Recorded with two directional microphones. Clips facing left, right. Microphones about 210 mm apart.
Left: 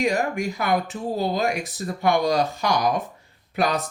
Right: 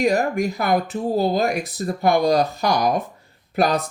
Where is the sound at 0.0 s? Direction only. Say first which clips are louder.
Right 4 dB; 40° right (ahead or behind).